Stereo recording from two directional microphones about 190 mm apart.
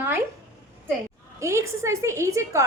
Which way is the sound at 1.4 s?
15° right (ahead or behind).